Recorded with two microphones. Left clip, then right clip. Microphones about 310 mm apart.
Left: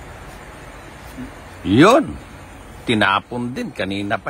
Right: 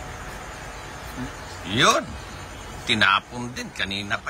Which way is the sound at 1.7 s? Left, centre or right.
Centre.